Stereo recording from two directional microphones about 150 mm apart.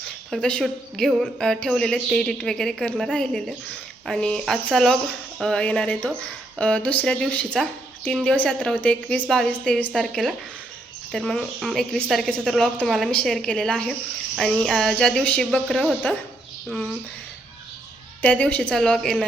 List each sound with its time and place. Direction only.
0.3 s speech: 5° left (ahead or behind)
18.2 s speech: 10° left (ahead or behind)